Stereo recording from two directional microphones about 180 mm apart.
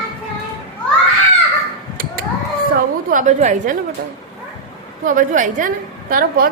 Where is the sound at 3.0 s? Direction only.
45° right (ahead or behind).